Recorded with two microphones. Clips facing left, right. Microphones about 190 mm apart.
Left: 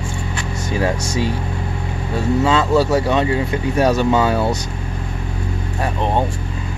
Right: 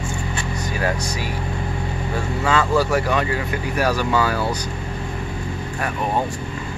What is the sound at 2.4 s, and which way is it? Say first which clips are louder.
Speech: left 3 dB; 25° left (ahead or behind).